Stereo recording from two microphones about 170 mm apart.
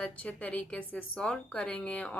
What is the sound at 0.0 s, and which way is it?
A woman's voice, 10° left (ahead or behind).